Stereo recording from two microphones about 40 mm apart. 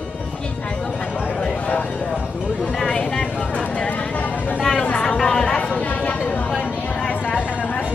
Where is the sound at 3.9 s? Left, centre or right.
Left.